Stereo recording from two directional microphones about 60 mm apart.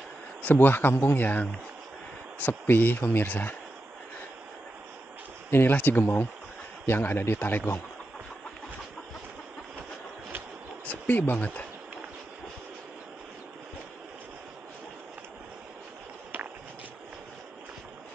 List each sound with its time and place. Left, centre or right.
0.4 s speech: left
2.6 s speech: left
5.5 s speech: left
10.9 s speech: left